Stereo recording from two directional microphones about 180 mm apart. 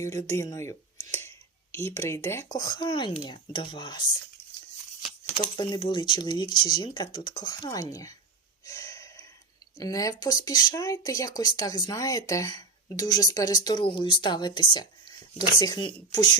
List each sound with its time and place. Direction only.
0.0 s speech: 15° left (ahead or behind)
5.4 s speech: 25° left (ahead or behind)
8.6 s gasp: 20° left (ahead or behind)
9.7 s speech: 20° left (ahead or behind)